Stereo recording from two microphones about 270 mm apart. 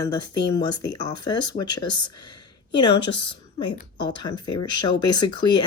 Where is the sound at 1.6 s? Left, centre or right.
Left.